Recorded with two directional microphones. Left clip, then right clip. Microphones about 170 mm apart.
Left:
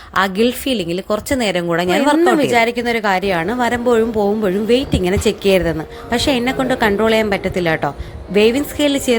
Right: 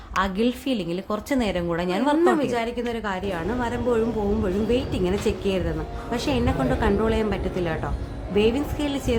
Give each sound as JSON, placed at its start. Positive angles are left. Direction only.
{"t": 0.2, "sound": "a woman's voice", "side_deg": 35}